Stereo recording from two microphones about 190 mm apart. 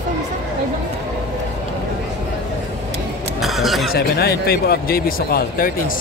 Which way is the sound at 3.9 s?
55° left (ahead or behind).